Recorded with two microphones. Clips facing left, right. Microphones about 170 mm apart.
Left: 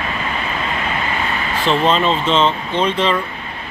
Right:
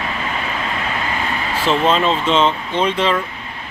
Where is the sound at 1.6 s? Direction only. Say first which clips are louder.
Even; 5° right (ahead or behind).